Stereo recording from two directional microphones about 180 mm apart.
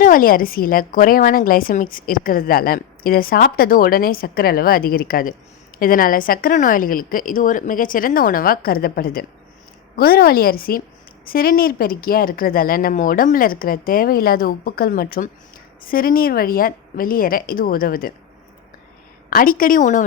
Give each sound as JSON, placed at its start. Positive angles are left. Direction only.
{"t": 0.0, "sound": "a woman's voice", "side_deg": 50}
{"t": 19.3, "sound": "a woman's voice", "side_deg": 50}